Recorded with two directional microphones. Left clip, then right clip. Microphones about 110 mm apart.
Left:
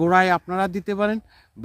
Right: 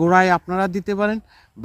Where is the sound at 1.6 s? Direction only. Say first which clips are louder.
Right 2 dB; 15° left (ahead or behind).